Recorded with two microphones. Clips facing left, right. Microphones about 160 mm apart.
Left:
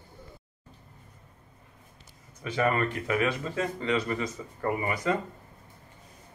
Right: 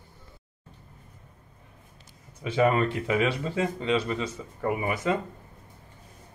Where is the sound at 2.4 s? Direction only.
20° right (ahead or behind).